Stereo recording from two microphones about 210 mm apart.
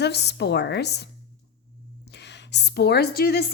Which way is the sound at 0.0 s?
50° left (ahead or behind).